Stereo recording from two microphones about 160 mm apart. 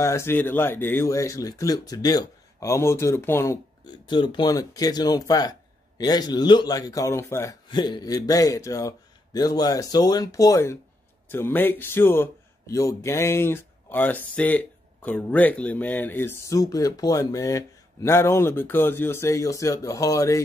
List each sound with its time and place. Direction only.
0.0 s a man's voice: 15° left (ahead or behind)
3.8 s speech: 30° left (ahead or behind)
7.7 s a man's voice: 30° left (ahead or behind)